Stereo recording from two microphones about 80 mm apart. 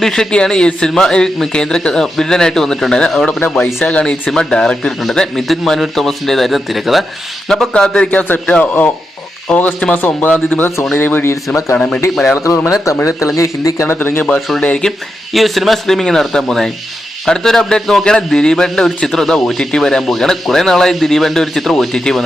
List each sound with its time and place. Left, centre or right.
0.0 s a man's voice: centre; by 11.3 s left
12.1 s speech: centre
12.7 s speech: left
13.8 s speech: left
14.3 s a man's voice: centre